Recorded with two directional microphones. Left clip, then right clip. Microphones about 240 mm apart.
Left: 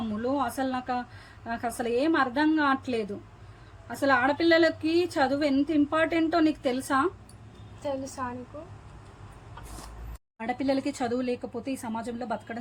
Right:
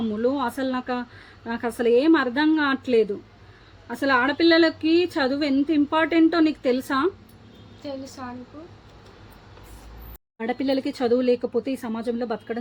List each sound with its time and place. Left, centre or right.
0.0 s a sound: right
1.5 s a woman's voice: right
8.2 s speech: centre
10.3 s a woman's voice: right